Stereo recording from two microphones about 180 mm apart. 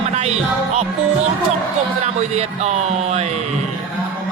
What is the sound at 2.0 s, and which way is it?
A man's voice, 40° right (ahead or behind).